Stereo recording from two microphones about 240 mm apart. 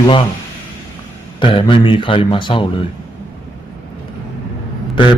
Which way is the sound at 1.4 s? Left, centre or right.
Left.